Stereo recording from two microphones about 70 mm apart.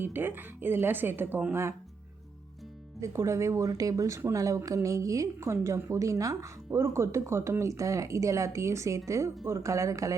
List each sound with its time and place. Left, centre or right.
0.0 s speech: right
3.0 s a woman's voice: right